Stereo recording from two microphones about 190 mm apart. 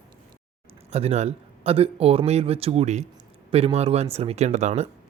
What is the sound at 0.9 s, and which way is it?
Speech, 35° right (ahead or behind).